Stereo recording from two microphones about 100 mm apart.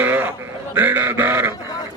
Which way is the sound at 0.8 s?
20° right (ahead or behind).